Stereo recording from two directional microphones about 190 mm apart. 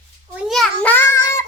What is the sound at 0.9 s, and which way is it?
Child singing, 15° left (ahead or behind).